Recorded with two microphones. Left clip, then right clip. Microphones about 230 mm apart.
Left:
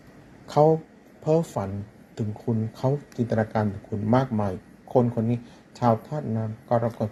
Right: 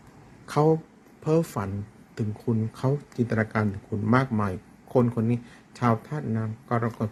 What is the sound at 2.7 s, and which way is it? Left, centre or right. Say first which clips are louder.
A man's voice: left 2 dB; centre.